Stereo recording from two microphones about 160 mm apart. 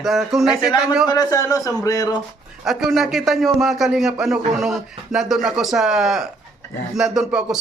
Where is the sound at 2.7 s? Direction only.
Centre (ahead or behind).